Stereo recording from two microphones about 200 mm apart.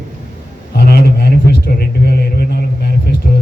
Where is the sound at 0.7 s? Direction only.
50° left (ahead or behind).